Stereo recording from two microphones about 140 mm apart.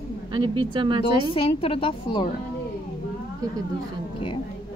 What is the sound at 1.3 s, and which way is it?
Speech, 40° left (ahead or behind).